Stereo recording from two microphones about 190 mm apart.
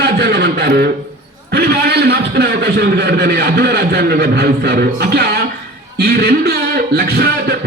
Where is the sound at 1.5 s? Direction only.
60° right (ahead or behind).